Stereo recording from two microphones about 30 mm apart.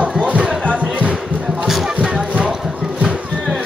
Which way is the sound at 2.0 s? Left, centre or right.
Right.